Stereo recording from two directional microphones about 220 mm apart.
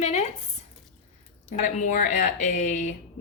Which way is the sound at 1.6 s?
35° left (ahead or behind).